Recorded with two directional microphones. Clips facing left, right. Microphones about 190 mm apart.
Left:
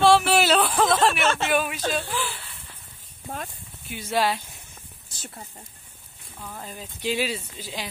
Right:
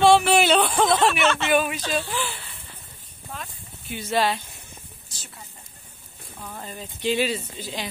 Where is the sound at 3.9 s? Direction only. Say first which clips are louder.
Right 1 dB; 10° left (ahead or behind).